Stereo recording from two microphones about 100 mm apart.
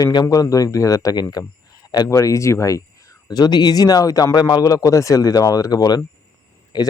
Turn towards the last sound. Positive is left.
turn(degrees=40)  # may be behind; listen again after turning